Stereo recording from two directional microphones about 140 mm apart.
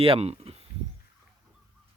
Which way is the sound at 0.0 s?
45° right (ahead or behind).